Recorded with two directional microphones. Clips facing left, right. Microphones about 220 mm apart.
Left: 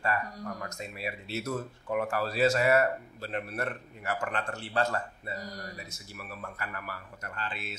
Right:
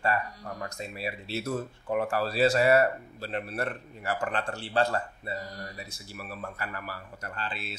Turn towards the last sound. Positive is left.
turn(degrees=-35)  # may be behind; listen again after turning